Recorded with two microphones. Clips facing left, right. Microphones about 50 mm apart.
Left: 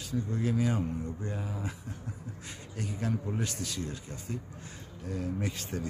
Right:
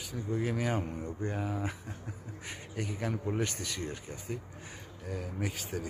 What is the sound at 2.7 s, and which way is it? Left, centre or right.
A man's voice, right.